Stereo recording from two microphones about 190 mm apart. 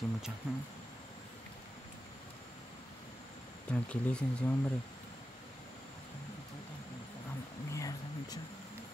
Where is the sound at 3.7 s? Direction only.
5° left (ahead or behind).